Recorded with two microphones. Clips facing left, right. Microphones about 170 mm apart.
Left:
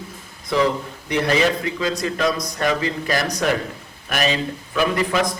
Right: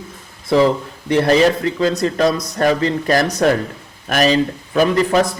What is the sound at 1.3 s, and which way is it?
Speech, 35° right (ahead or behind).